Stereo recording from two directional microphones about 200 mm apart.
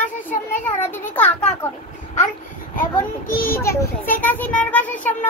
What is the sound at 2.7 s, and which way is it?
Child singing, 45° left (ahead or behind).